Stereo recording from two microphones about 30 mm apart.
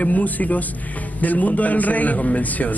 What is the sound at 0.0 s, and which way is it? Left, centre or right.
A man's voice, left.